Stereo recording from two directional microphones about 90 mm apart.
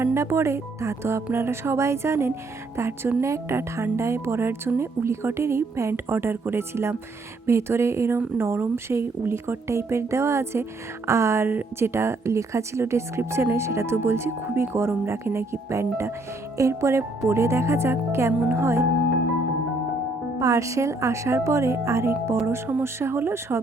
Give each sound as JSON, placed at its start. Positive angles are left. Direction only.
{"t": 0.0, "sound": "speech", "side_deg": -30}
{"t": 20.4, "sound": "speech", "side_deg": -35}